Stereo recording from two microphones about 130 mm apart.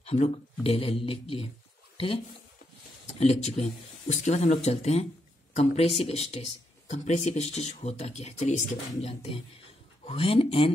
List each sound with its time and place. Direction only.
0.0 s speech: 55° left (ahead or behind)
3.2 s speech: 55° left (ahead or behind)
10.0 s speech: 45° left (ahead or behind)